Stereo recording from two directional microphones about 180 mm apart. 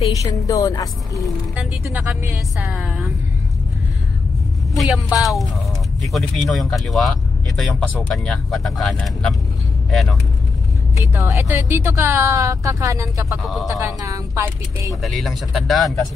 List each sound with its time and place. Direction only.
0.2 s a woman's voice: 20° left (ahead or behind)
1.2 s speech: 5° right (ahead or behind)
4.7 s speech: centre (ahead or behind)
11.1 s speech: 15° right (ahead or behind)
15.0 s speech: centre (ahead or behind)